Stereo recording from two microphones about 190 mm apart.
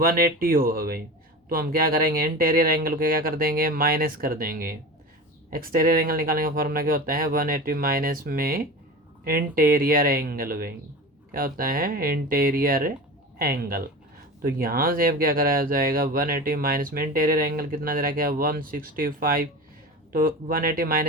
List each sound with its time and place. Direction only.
0.0 s speech: 50° right (ahead or behind)